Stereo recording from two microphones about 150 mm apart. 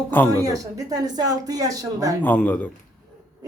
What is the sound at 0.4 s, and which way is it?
A woman's voice, 25° right (ahead or behind).